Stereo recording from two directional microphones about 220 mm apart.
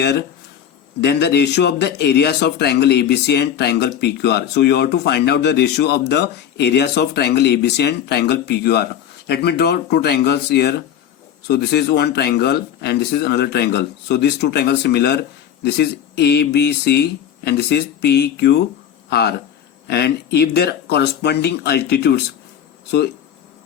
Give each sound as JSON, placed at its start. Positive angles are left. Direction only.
{"t": 0.0, "sound": "speech", "side_deg": 50}
{"t": 19.9, "sound": "speech", "side_deg": 50}